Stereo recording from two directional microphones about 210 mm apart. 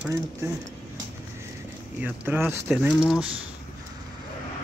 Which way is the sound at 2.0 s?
10° right (ahead or behind).